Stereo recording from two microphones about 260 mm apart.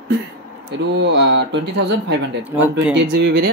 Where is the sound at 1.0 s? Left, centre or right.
Right.